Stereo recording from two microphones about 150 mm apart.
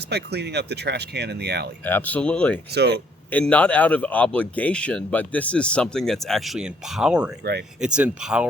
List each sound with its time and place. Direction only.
0.1 s speech: 90° right
1.8 s speech: 10° left (ahead or behind); by 8.4 s 5° right (ahead or behind)